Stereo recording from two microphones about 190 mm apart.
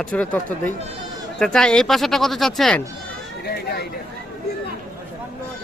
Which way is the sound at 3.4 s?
55° left (ahead or behind).